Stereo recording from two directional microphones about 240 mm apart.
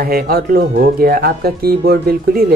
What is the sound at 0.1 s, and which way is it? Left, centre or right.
Speech, right.